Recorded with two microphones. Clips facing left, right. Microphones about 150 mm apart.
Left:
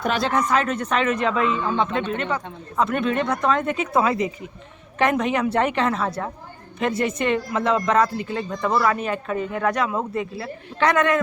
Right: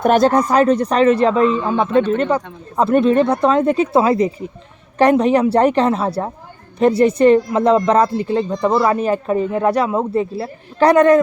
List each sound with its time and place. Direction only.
0.0 s speech: 45° right (ahead or behind)